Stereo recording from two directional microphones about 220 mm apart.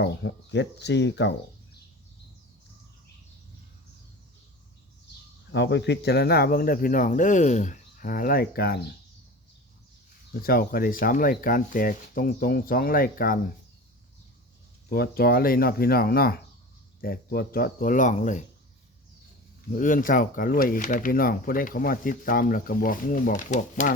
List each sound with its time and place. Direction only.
0.0 s speech: 50° left (ahead or behind)
5.5 s speech: 55° left (ahead or behind)
10.4 s speech: 45° left (ahead or behind)
14.8 s speech: 45° left (ahead or behind)
19.7 s speech: 35° left (ahead or behind)